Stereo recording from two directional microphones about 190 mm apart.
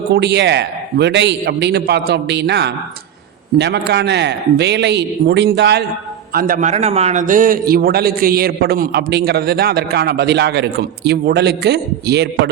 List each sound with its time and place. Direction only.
0.1 s a man's voice: 65° right (ahead or behind)
6.3 s a man's voice: 50° right (ahead or behind)